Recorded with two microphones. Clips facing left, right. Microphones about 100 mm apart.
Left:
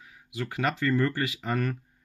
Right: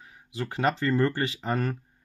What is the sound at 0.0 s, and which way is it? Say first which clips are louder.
Speech: right 1 dB; 30° right (ahead or behind).